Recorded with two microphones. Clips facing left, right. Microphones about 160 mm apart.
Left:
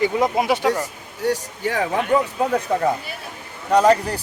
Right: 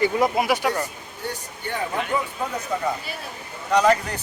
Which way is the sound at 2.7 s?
55° left (ahead or behind).